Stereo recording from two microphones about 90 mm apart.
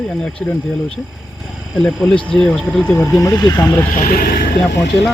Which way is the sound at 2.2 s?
10° left (ahead or behind).